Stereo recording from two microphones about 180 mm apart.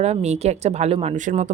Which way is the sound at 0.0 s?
35° right (ahead or behind).